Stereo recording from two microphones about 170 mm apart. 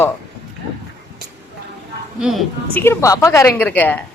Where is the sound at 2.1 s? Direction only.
5° right (ahead or behind).